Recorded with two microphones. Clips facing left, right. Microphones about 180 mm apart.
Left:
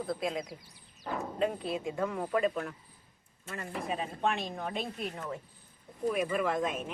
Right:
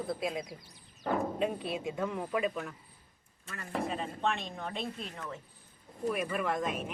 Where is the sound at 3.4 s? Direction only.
25° left (ahead or behind).